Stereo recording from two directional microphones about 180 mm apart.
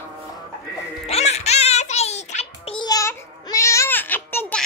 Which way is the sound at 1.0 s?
35° left (ahead or behind).